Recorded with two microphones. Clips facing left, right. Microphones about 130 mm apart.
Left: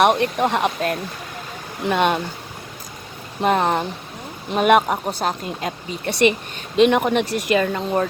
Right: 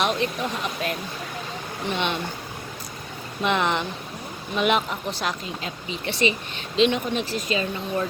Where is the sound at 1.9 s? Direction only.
50° left (ahead or behind).